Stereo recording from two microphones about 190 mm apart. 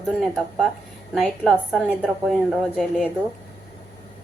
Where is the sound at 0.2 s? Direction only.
Centre (ahead or behind).